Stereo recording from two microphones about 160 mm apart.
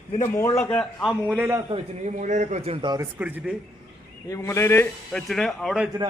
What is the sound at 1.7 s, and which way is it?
Speech, 40° right (ahead or behind).